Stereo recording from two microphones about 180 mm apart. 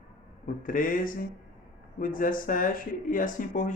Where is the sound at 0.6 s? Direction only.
50° left (ahead or behind).